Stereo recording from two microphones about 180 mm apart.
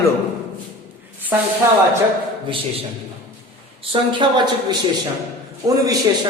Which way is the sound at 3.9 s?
25° right (ahead or behind).